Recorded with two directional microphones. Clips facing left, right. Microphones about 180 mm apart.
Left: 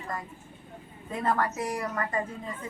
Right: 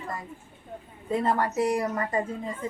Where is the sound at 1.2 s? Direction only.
25° right (ahead or behind).